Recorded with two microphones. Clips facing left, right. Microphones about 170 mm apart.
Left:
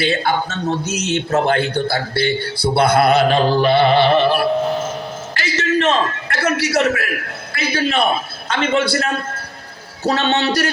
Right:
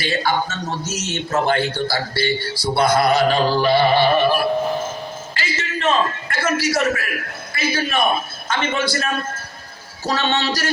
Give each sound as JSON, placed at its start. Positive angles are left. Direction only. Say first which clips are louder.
{"t": 0.0, "sound": "speech", "louder": "left 3 dB", "side_deg": 60}
{"t": 3.3, "sound": "music", "louder": "left 3 dB", "side_deg": 20}
{"t": 3.6, "sound": "music", "louder": "left 2 dB", "side_deg": 65}
{"t": 5.3, "sound": "a sound", "louder": "left 10 dB", "side_deg": 75}
{"t": 7.5, "sound": "a man's voice", "louder": "left 3 dB", "side_deg": 65}